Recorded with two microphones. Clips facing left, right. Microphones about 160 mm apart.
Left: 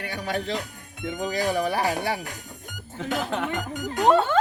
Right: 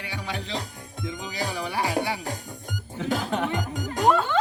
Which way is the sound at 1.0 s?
50° left (ahead or behind).